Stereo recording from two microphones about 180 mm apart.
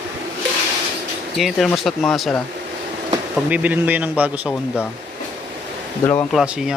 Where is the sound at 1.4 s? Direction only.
Centre (ahead or behind).